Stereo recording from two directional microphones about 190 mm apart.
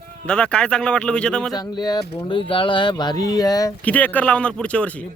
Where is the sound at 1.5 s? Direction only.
20° left (ahead or behind).